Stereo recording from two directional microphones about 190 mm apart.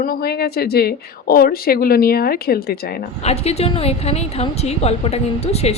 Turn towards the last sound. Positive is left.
turn(degrees=35)  # may be behind; listen again after turning